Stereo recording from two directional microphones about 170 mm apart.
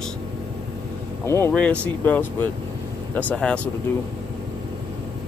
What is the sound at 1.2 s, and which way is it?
Speech, 15° left (ahead or behind).